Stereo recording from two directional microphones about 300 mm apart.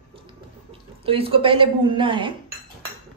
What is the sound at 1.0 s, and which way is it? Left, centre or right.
A woman's voice, centre.